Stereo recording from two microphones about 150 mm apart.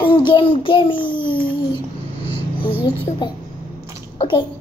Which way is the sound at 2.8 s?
30° left (ahead or behind).